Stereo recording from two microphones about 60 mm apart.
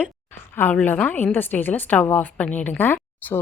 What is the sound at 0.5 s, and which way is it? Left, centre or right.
A woman's voice, left.